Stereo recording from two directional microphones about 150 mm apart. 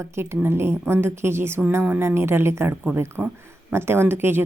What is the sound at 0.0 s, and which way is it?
A woman's voice, 15° right (ahead or behind).